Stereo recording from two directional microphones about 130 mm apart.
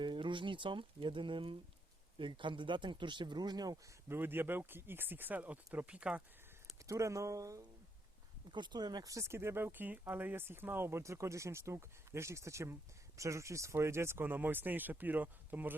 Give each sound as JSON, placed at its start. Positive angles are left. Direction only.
{"t": 0.0, "sound": "speech", "side_deg": -40}
{"t": 4.1, "sound": "speech", "side_deg": -15}
{"t": 6.8, "sound": "speech", "side_deg": -25}
{"t": 8.4, "sound": "speech", "side_deg": -35}